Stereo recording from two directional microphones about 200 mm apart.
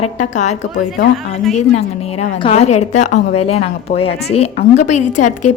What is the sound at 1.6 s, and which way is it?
A woman's voice, 30° left (ahead or behind).